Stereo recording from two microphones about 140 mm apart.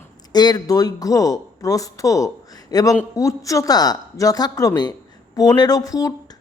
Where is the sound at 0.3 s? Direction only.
30° left (ahead or behind).